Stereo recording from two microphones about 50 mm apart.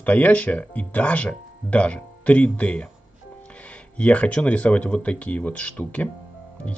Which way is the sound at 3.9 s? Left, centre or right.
Left.